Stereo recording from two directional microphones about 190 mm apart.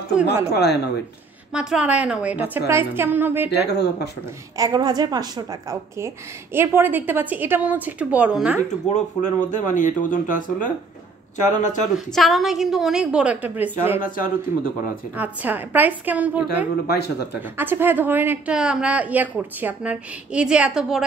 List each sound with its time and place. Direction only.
0.1 s a woman's voice: 10° right (ahead or behind)
0.5 s speech: 60° left (ahead or behind)
1.5 s a woman's voice: 5° right (ahead or behind)
3.4 s speech: 60° left (ahead or behind)
4.6 s a woman's voice: 20° right (ahead or behind); by 8.5 s 5° right (ahead or behind)
8.5 s speech: 40° left (ahead or behind)
11.9 s a woman's voice: centre (ahead or behind)
14.0 s a man's voice: 45° left (ahead or behind)
15.1 s a woman's voice: 10° right (ahead or behind)
16.8 s speech: 55° left (ahead or behind)
17.6 s a woman's voice: 10° right (ahead or behind)